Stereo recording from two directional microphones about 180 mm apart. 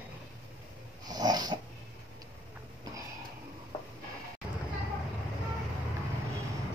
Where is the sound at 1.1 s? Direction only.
20° right (ahead or behind).